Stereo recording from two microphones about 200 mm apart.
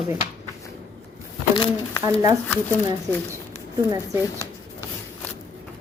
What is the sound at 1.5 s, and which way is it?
Speech, 25° left (ahead or behind).